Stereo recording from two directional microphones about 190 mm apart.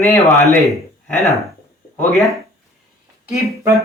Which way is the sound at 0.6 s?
Centre (ahead or behind).